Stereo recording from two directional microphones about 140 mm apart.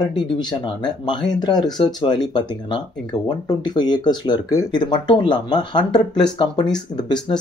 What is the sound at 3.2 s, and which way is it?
Speech, 30° left (ahead or behind).